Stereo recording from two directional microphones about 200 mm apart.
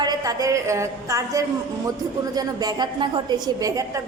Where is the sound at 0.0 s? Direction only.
20° right (ahead or behind).